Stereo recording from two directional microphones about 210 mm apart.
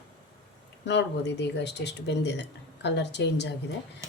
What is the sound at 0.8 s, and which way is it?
Speech, 55° left (ahead or behind).